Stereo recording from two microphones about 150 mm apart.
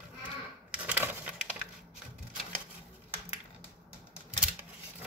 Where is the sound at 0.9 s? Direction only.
10° right (ahead or behind).